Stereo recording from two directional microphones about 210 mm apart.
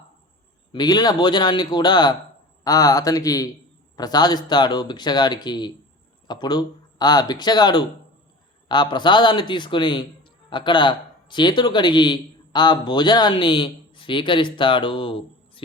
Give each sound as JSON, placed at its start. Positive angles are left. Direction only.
{"t": 0.7, "sound": "a man's voice", "side_deg": 20}